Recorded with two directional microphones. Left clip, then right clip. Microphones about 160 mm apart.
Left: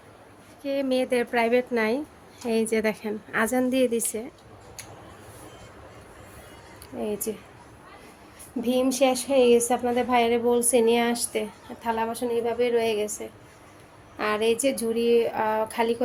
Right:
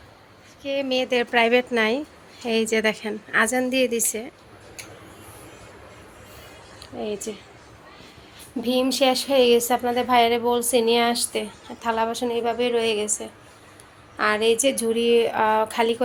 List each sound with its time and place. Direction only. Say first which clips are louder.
0.6 s a woman's voice: right 1 dB; 25° left (ahead or behind)
1.3 s a woman's voice: right 4 dB; centre (ahead or behind)
7.0 s a woman's voice: even; 10° left (ahead or behind)
8.6 s speech: right 2 dB; 5° left (ahead or behind)
14.2 s speech: right 4 dB; 5° left (ahead or behind)